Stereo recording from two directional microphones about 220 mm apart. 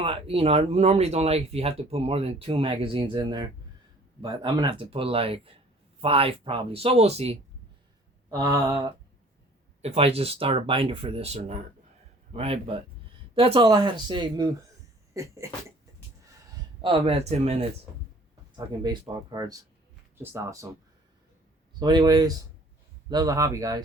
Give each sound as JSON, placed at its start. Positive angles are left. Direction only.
{"t": 0.0, "sound": "speech", "side_deg": -25}
{"t": 8.3, "sound": "speech", "side_deg": -15}
{"t": 9.8, "sound": "speech", "side_deg": -25}
{"t": 15.1, "sound": "a sound", "side_deg": -15}
{"t": 16.8, "sound": "speech", "side_deg": -25}
{"t": 18.5, "sound": "speech", "side_deg": -20}
{"t": 21.8, "sound": "speech", "side_deg": -20}